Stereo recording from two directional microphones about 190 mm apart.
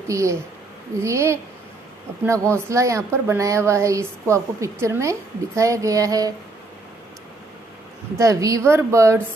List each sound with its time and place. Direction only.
0.1 s a woman's voice: 15° right (ahead or behind)
8.2 s a woman's voice: 15° right (ahead or behind)